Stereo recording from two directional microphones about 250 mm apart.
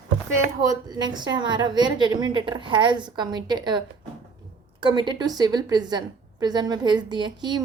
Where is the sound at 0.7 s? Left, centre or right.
Centre.